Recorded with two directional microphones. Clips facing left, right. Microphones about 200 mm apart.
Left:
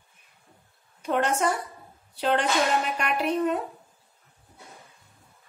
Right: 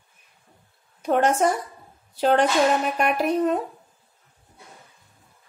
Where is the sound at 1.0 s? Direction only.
45° right (ahead or behind).